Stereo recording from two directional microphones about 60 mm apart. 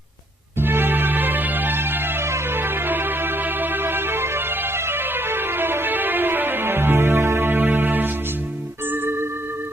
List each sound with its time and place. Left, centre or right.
0.6 s music: right